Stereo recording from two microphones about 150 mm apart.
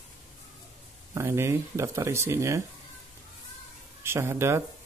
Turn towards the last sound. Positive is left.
turn(degrees=-15)  # may be behind; listen again after turning